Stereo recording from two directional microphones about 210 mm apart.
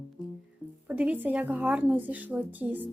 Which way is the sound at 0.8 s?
5° right (ahead or behind).